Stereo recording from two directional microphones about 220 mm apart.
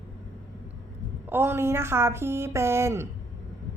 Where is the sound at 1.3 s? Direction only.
10° right (ahead or behind).